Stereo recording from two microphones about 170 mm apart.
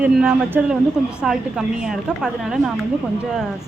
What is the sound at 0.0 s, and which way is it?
A woman's voice, 5° right (ahead or behind).